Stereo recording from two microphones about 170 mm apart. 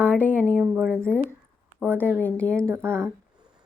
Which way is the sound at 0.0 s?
10° left (ahead or behind).